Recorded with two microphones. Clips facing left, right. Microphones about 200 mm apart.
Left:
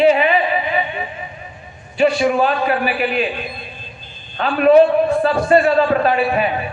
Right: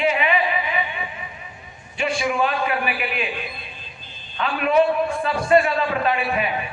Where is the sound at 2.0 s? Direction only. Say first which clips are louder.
Left 7 dB; 35° left (ahead or behind).